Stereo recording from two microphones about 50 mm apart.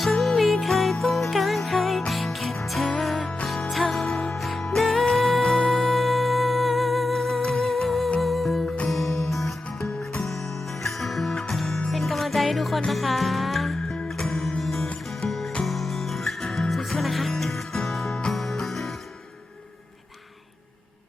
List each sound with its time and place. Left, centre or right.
0.0 s music: centre
8.6 s music: left
8.9 s music: centre
9.8 s music: centre
10.2 s music: centre